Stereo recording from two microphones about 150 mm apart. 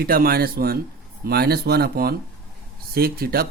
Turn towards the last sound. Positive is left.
turn(degrees=-85)